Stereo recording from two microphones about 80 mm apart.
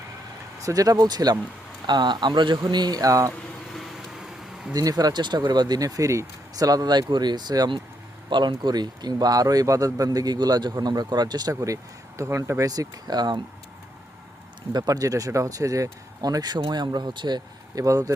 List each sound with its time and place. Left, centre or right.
0.6 s speech: right
1.9 s speech: right
2.6 s speech: right
3.8 s a sound: centre
4.7 s speech: right
11.6 s speech: right
14.7 s speech: right
17.8 s speech: right